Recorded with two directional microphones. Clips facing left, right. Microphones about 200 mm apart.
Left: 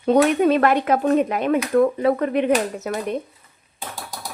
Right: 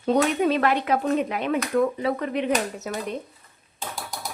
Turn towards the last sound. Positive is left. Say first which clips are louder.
# left 5 dB
turn(degrees=60)  # may be behind; listen again after turning